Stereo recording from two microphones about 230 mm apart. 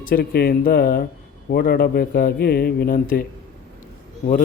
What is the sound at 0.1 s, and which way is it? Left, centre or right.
A man's voice, left.